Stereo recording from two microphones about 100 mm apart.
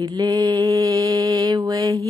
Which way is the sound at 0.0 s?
45° right (ahead or behind).